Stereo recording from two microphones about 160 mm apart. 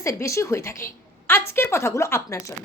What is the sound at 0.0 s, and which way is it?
A woman's voice, 20° left (ahead or behind).